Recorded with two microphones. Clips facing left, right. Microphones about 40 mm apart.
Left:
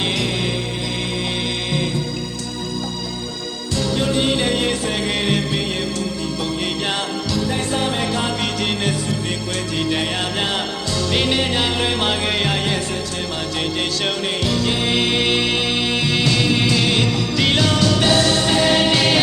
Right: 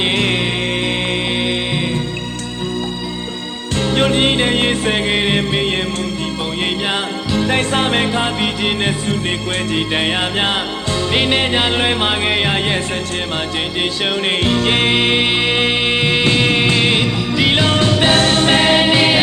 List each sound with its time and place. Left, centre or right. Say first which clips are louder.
0.0 s music: right 5 dB; right
3.8 s music: right 5 dB; right
6.8 s music: right 3 dB; right
7.3 s music: right 6 dB; right
8.0 s music: right 4 dB; right
14.3 s music: right 7 dB; right
14.9 s music: right 3 dB; right
17.0 s music: right 2 dB; right
17.7 s music: right 3 dB; right